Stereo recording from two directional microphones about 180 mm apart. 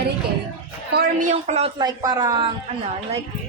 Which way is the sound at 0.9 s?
45° right (ahead or behind).